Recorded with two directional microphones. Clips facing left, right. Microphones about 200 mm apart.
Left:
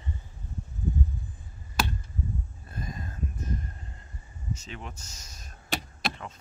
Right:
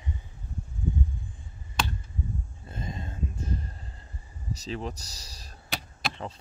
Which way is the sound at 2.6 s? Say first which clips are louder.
Right 2 dB; 25° right (ahead or behind).